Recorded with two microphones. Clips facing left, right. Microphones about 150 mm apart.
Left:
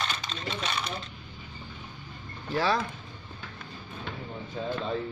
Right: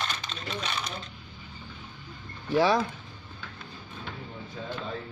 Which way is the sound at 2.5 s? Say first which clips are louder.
Right 4 dB; 15° right (ahead or behind).